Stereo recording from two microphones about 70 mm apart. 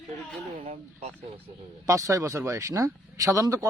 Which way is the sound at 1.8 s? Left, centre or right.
Right.